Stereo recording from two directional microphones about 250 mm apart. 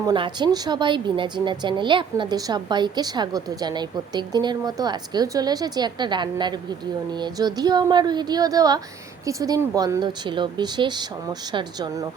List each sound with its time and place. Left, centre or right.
0.0 s speech: centre